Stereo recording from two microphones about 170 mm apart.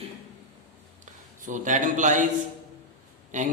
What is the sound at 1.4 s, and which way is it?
Speech, 50° right (ahead or behind).